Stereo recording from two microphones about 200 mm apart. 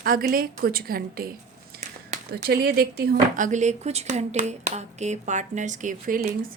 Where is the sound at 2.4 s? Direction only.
50° right (ahead or behind).